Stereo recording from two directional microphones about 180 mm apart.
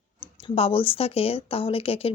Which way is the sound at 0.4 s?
30° left (ahead or behind).